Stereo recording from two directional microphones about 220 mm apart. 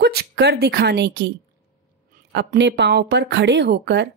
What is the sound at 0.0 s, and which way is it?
A woman's voice, 45° right (ahead or behind).